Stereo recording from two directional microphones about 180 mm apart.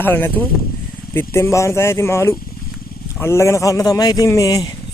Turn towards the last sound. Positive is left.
turn(degrees=20)  # may be behind; listen again after turning